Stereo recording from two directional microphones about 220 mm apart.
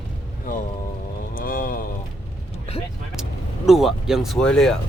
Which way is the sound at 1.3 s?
40° left (ahead or behind).